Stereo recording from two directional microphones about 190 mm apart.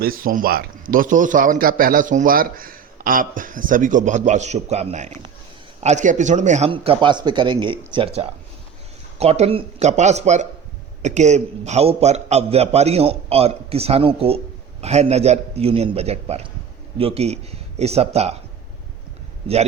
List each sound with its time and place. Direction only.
0.2 s a man's voice: 45° right (ahead or behind)